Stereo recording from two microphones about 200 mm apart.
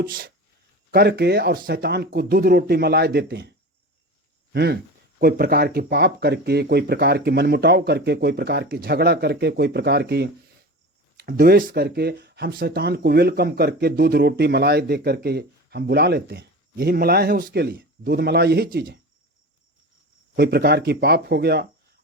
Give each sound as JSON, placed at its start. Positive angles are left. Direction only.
{"t": 0.1, "sound": "speech", "side_deg": -45}
{"t": 4.5, "sound": "speech", "side_deg": -55}
{"t": 20.3, "sound": "speech", "side_deg": -55}